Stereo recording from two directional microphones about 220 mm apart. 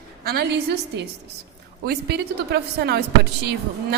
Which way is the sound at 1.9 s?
50° right (ahead or behind).